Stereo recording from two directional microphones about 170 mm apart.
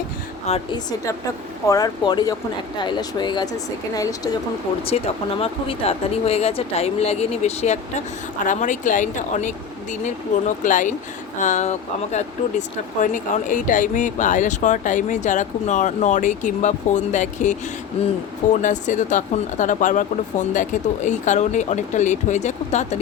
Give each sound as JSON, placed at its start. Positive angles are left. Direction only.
{"t": 0.4, "sound": "speech", "side_deg": 35}
{"t": 1.6, "sound": "speech", "side_deg": 20}
{"t": 4.9, "sound": "speech", "side_deg": 40}